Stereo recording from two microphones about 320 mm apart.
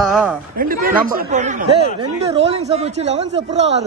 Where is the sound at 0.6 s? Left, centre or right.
Right.